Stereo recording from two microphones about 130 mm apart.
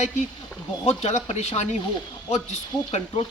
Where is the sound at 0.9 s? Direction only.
60° left (ahead or behind).